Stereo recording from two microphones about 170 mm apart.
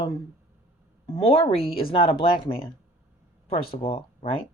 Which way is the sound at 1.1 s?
30° left (ahead or behind).